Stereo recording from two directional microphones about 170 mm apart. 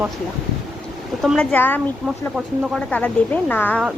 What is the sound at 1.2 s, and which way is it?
Speech, 5° left (ahead or behind).